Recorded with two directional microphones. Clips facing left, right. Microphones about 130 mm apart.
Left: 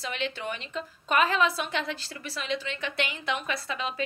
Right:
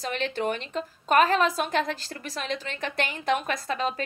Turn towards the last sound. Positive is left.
turn(degrees=-45)  # may be behind; listen again after turning